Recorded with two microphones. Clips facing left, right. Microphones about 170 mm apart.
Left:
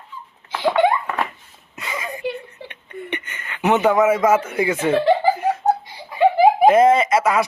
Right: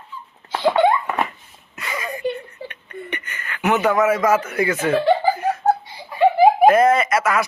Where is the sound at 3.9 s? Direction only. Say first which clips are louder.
Left 2 dB; 25° left (ahead or behind).